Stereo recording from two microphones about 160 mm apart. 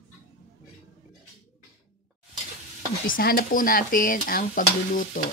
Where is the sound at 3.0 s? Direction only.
65° left (ahead or behind).